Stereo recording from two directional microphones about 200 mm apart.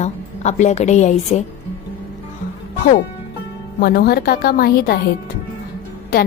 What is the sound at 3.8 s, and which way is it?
A woman's voice, 50° left (ahead or behind).